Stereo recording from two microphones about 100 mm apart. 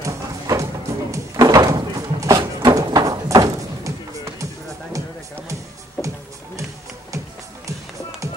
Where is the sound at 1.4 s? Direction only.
40° right (ahead or behind).